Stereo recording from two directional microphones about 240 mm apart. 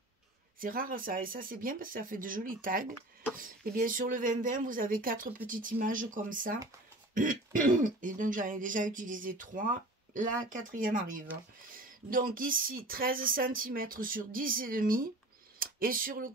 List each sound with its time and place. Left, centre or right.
0.6 s speech: right
7.8 s speech: right